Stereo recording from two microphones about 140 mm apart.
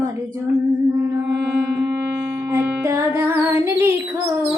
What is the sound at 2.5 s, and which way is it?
Music, 20° right (ahead or behind).